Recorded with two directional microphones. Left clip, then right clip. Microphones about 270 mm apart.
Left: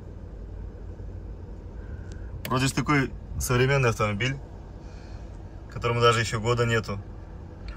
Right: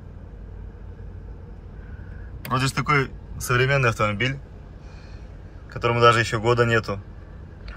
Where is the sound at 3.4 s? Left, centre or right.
Centre.